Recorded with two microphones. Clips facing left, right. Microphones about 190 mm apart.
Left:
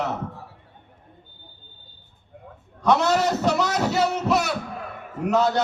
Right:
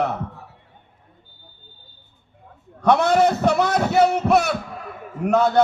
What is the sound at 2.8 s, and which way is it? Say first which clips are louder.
A man's voice: right 4 dB; 55° right (ahead or behind).